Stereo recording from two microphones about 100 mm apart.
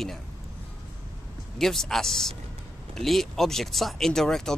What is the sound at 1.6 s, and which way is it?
Speech, 5° left (ahead or behind).